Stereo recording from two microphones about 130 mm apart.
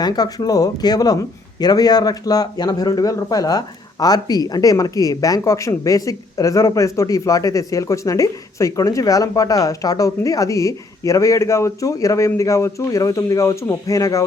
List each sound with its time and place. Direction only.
0.0 s speech: 30° left (ahead or behind)